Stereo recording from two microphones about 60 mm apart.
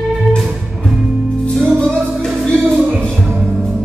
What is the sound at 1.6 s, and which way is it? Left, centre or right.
Music, centre.